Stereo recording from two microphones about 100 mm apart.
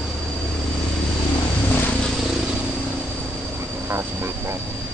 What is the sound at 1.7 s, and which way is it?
Vehicle, 20° left (ahead or behind).